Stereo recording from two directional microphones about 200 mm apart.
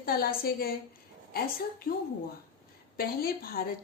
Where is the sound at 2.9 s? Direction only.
50° left (ahead or behind).